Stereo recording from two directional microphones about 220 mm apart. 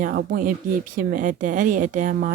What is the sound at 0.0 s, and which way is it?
Speech, 40° right (ahead or behind).